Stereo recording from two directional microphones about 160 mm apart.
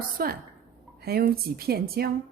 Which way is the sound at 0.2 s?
65° right (ahead or behind).